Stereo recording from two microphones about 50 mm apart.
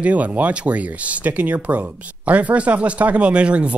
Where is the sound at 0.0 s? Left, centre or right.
Right.